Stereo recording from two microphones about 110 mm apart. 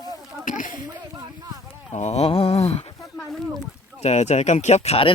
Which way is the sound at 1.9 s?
80° left.